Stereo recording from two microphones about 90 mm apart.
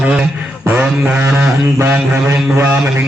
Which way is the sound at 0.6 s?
15° right (ahead or behind).